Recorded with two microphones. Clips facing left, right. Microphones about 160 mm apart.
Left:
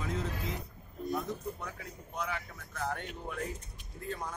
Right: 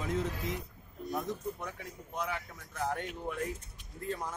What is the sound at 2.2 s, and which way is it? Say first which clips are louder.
Speech: right 1 dB; 15° right (ahead or behind).